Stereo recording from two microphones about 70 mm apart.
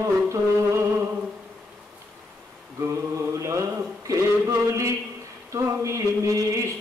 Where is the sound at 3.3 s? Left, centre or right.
Right.